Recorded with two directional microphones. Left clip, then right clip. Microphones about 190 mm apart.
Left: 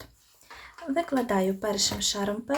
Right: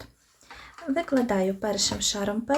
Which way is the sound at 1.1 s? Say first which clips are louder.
Right 3 dB; 5° right (ahead or behind).